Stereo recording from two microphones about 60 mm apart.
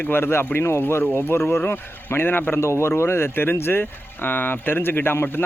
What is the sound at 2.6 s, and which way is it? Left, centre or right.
Speech, left.